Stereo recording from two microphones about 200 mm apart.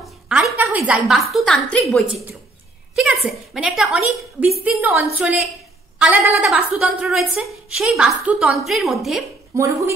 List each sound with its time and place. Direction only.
0.0 s a woman's voice: 5° right (ahead or behind)
9.6 s a woman's voice: 15° right (ahead or behind)